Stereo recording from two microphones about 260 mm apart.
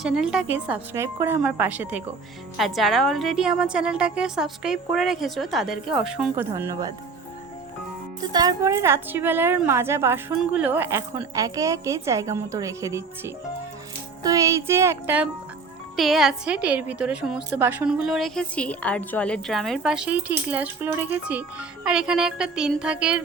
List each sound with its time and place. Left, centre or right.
0.0 s a woman's voice: centre
8.3 s a woman's voice: centre